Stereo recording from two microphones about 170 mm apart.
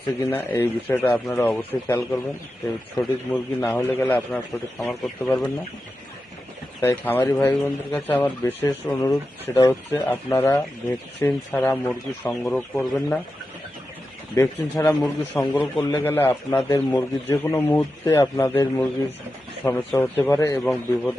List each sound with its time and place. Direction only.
0.3 s a man's voice: 10° left (ahead or behind)
6.8 s a man's voice: 10° left (ahead or behind)
14.3 s a man's voice: 15° left (ahead or behind)